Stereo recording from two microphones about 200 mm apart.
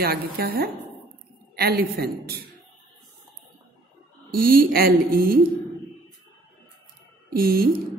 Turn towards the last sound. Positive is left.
turn(degrees=-50)  # may be behind; listen again after turning